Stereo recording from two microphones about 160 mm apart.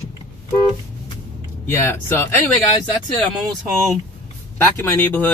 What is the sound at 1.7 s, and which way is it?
Speech, 15° left (ahead or behind).